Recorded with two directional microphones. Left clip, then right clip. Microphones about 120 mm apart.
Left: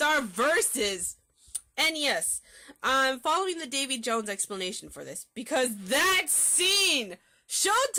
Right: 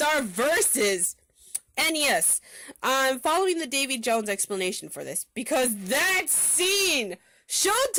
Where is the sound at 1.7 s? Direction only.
65° right (ahead or behind).